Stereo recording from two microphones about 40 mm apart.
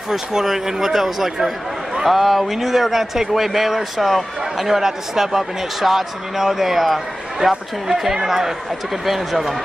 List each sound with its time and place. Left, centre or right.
0.1 s speech: centre